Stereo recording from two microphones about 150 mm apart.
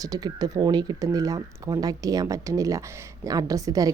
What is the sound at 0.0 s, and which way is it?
A woman's voice, 25° right (ahead or behind).